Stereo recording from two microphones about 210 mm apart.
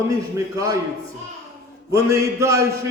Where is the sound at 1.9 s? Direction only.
15° right (ahead or behind).